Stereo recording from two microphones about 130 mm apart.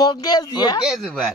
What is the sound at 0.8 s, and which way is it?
Speech, 5° right (ahead or behind).